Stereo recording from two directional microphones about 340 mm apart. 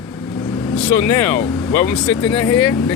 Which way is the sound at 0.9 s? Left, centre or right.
Centre.